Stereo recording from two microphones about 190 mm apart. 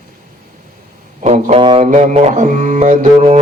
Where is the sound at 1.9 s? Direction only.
35° right (ahead or behind).